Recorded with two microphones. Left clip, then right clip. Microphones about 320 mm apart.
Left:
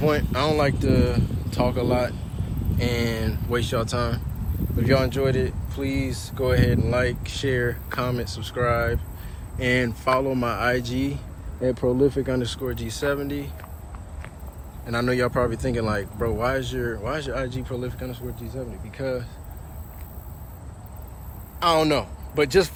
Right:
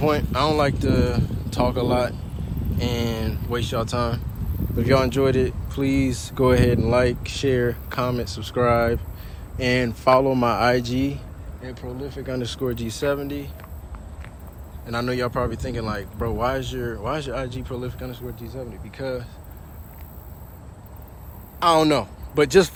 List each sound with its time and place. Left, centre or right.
0.0 s speech: centre
11.6 s speech: centre
14.8 s speech: centre
21.6 s speech: centre